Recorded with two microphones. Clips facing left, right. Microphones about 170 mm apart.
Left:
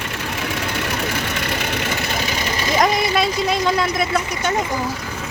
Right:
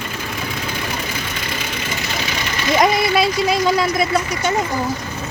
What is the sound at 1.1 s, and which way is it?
Vehicle, 65° left (ahead or behind).